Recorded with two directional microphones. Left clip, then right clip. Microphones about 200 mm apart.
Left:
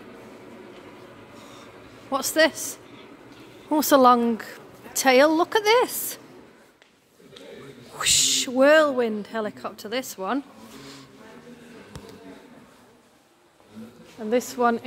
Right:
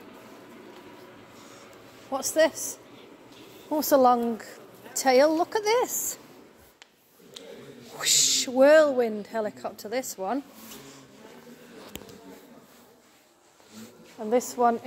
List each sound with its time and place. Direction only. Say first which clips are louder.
2.0 s a woman's voice: left 3 dB; 20° left (ahead or behind)
8.0 s speech: left 2 dB; 5° left (ahead or behind)
14.3 s a woman's voice: left 1 dB; 5° left (ahead or behind)